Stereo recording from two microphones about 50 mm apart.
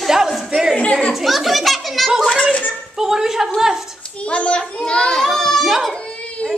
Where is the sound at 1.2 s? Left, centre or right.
Centre.